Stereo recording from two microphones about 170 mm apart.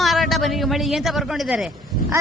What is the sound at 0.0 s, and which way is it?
A man's voice, centre (ahead or behind).